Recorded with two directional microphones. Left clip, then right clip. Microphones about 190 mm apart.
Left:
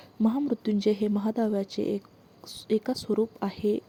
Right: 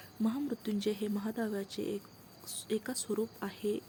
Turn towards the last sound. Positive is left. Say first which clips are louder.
# left 8 dB
turn(degrees=35)  # may be behind; listen again after turning